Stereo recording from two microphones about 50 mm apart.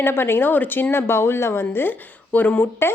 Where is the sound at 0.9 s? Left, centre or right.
Left.